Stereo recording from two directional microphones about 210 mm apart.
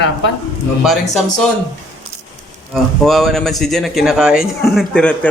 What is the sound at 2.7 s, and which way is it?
Speech, centre (ahead or behind).